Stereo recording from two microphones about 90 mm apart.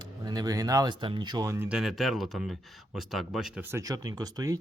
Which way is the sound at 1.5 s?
15° right (ahead or behind).